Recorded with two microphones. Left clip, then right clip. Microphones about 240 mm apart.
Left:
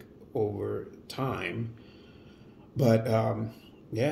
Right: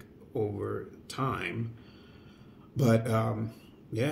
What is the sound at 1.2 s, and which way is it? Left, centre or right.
Speech, centre.